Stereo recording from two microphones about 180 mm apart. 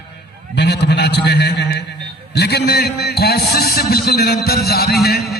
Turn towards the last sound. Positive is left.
turn(degrees=60)  # may be behind; listen again after turning